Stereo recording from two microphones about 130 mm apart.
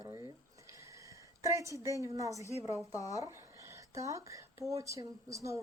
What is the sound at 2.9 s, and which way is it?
Speech, 25° left (ahead or behind).